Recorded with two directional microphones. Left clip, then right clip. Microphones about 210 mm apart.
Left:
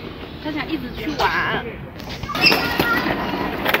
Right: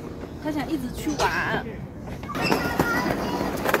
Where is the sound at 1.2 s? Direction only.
30° right (ahead or behind).